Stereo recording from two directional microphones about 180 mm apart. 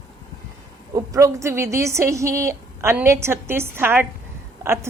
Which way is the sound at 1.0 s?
15° right (ahead or behind).